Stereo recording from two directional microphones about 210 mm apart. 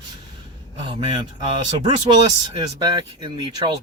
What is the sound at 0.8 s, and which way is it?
Speech, 25° right (ahead or behind).